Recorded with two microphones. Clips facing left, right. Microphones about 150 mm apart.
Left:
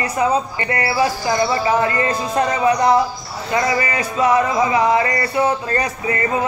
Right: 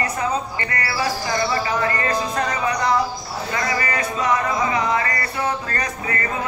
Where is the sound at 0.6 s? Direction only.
20° left (ahead or behind).